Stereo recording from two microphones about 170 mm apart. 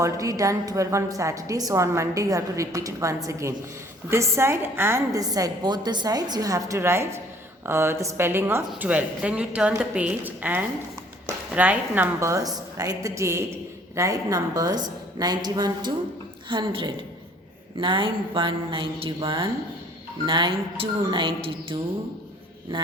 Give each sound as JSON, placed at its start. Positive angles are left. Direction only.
{"t": 0.0, "sound": "a woman's voice", "side_deg": -20}
{"t": 22.7, "sound": "music", "side_deg": -30}